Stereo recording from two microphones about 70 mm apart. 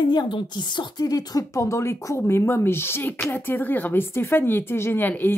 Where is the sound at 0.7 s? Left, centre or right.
Left.